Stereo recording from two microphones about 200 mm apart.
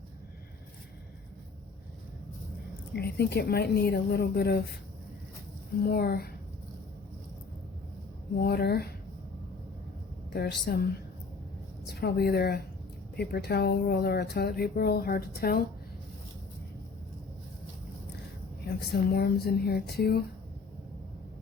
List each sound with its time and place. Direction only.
2.9 s a woman's voice: 55° left (ahead or behind)
5.8 s speech: 50° left (ahead or behind)
8.4 s speech: 50° left (ahead or behind)
10.3 s a woman's voice: 55° left (ahead or behind)
11.9 s speech: 55° left (ahead or behind)
19.1 s speech: 50° left (ahead or behind)